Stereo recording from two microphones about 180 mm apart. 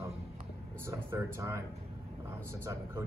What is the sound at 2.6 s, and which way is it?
Speech, 15° right (ahead or behind).